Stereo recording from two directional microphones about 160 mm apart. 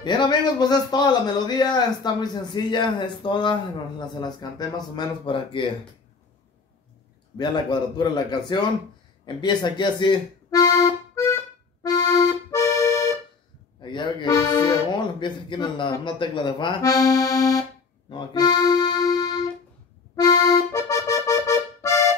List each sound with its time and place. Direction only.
0.0 s a man's voice: 25° left (ahead or behind)
7.3 s a man's voice: 30° left (ahead or behind)
11.8 s accordion: 20° left (ahead or behind)
18.1 s music: 30° left (ahead or behind)
20.2 s accordion: 25° left (ahead or behind)